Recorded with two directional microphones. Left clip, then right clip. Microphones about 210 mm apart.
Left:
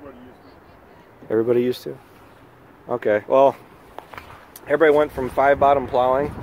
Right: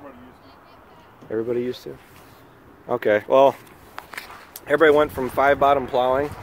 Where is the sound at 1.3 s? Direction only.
35° left (ahead or behind).